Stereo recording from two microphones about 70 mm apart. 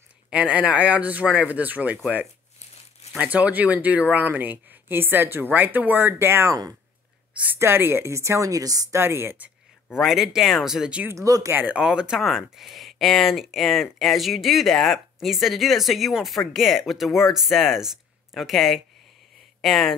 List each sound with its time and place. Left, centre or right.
0.3 s speech: centre
3.2 s speech: centre; by 6.5 s right
7.5 s a woman's voice: right
8.9 s speech: right
9.8 s speech: centre
11.1 s a woman's voice: right
11.5 s speech: right
11.8 s speech: centre